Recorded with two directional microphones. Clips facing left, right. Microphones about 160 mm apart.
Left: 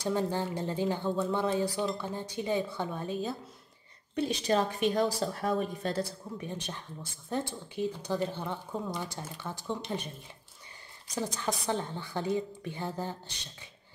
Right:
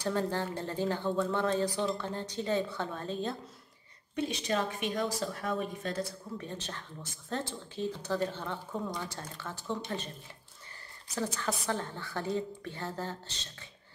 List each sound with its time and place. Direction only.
0.0 s speech: 15° left (ahead or behind)
4.1 s a woman's voice: 35° left (ahead or behind)
6.3 s speech: 15° left (ahead or behind)
11.3 s speech: 15° left (ahead or behind)